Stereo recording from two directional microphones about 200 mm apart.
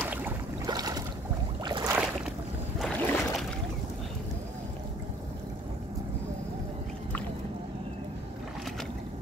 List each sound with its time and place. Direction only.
0.0 s boat: 10° right (ahead or behind)
0.7 s boat: 20° right (ahead or behind)
2.8 s boat: centre (ahead or behind)